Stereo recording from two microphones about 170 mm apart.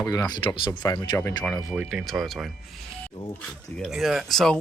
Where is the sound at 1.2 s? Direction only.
15° left (ahead or behind).